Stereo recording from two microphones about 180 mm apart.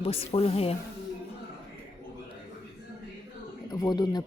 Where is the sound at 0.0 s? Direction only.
35° left (ahead or behind).